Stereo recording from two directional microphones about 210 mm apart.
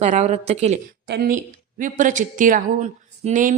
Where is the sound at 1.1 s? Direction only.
45° right (ahead or behind).